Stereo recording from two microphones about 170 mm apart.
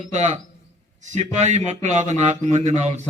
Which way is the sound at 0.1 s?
45° right (ahead or behind).